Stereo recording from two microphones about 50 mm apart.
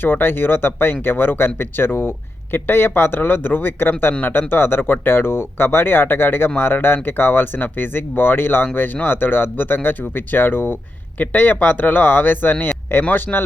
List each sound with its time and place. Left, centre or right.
0.0 s speech: left
11.2 s speech: left